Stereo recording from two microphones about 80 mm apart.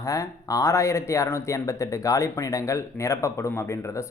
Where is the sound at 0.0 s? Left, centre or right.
Left.